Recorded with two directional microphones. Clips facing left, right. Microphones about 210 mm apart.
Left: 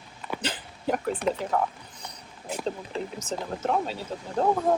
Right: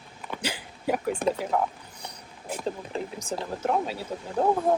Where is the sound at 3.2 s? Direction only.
10° right (ahead or behind).